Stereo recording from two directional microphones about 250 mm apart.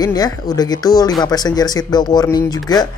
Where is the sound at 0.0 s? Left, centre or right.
Centre.